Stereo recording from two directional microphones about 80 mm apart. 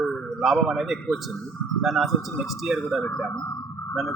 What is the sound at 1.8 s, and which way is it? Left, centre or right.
A man's voice, centre.